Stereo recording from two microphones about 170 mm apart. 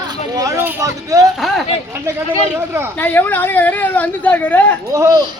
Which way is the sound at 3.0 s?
10° left (ahead or behind).